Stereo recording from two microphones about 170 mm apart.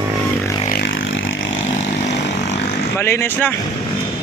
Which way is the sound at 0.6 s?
60° left (ahead or behind).